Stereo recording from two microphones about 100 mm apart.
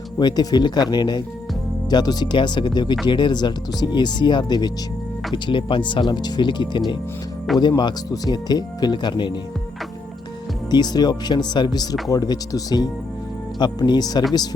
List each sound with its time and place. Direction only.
0.2 s speech: 45° left (ahead or behind)
10.7 s speech: 45° left (ahead or behind)